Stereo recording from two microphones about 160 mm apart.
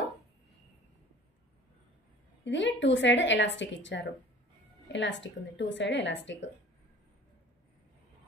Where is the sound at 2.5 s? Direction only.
90° left.